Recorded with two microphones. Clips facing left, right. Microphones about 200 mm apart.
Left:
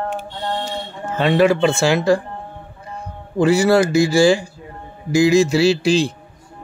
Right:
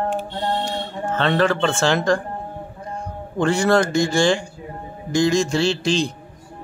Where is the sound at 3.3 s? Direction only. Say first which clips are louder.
Left 4 dB; 5° left (ahead or behind).